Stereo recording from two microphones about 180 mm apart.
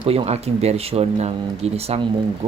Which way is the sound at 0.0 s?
30° right (ahead or behind).